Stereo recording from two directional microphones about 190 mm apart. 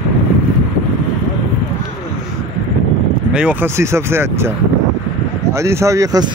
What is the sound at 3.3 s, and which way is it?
Speech, 5° right (ahead or behind).